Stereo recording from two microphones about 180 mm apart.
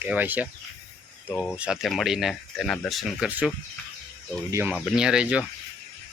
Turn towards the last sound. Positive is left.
turn(degrees=-5)  # may be behind; listen again after turning